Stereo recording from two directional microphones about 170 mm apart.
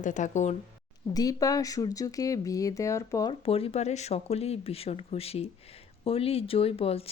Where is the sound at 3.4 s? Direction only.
35° left (ahead or behind).